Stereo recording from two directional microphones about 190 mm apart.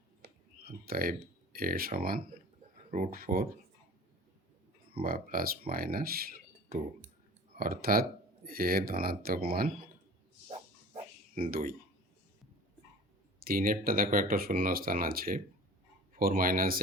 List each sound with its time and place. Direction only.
0.9 s speech: 50° right (ahead or behind)
5.0 s speech: 50° right (ahead or behind)
11.5 s speech: 50° right (ahead or behind)
13.4 s speech: 50° right (ahead or behind)